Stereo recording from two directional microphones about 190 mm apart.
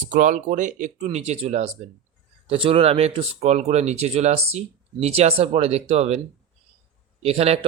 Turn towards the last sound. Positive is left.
turn(degrees=-30)  # may be behind; listen again after turning